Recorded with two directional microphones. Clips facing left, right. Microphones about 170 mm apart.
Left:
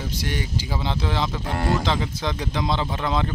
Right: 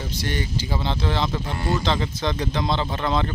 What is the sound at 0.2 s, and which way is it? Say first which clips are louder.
Speech: right 3 dB; 10° left (ahead or behind).